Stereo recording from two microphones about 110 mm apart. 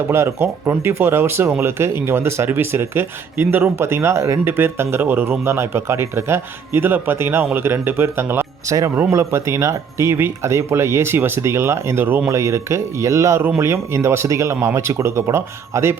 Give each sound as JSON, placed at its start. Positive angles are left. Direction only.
{"t": 0.1, "sound": "speech", "side_deg": -25}